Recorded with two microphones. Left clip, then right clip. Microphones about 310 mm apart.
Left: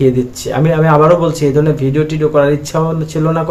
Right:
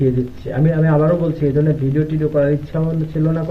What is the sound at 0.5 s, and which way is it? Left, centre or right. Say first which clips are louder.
Speech: left 7 dB; left.